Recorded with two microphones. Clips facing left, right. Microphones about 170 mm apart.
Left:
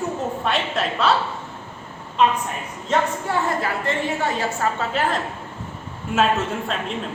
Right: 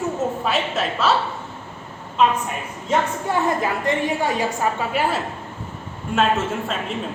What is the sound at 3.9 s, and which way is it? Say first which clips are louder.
A woman's voice: right 3 dB; 15° right (ahead or behind).